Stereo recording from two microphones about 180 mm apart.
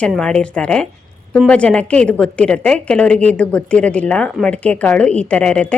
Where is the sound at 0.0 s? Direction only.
5° left (ahead or behind).